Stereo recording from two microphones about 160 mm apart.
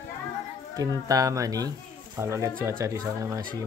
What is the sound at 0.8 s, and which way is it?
Speech, 20° right (ahead or behind).